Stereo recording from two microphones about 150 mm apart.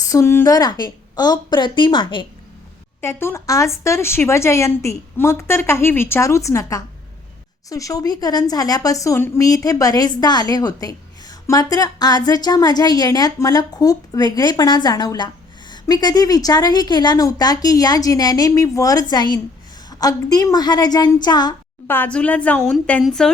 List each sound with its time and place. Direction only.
0.0 s a woman's voice: 20° left (ahead or behind)
3.0 s a woman's voice: 15° left (ahead or behind)
21.8 s speech: 10° left (ahead or behind)